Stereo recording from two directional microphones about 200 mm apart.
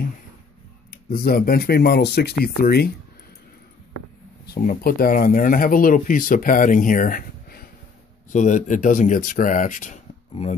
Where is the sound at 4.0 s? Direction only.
80° left.